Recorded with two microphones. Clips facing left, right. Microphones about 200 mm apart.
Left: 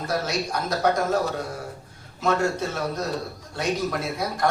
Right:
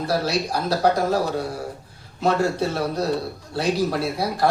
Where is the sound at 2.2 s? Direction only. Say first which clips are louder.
Right 3 dB; 35° right (ahead or behind).